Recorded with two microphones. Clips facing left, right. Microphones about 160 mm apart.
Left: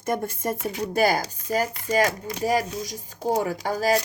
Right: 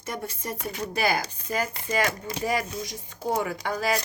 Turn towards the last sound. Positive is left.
turn(degrees=40)  # may be behind; listen again after turning